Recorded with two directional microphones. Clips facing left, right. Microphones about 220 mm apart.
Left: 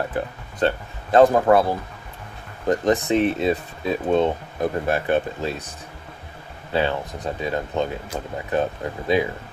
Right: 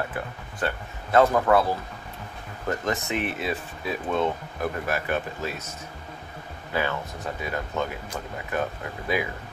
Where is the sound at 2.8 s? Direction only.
35° left (ahead or behind).